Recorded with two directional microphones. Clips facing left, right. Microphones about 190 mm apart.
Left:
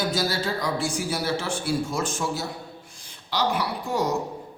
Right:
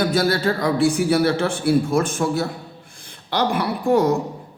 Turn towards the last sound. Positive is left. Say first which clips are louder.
# right 8 dB
turn(degrees=-55)  # may be behind; listen again after turning